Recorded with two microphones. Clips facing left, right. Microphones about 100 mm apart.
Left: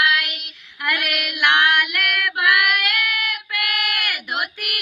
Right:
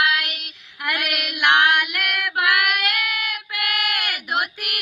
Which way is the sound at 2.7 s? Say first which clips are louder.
Left 1 dB; 20° right (ahead or behind).